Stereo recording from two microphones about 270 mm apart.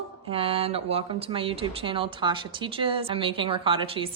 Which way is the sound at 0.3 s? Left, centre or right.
Right.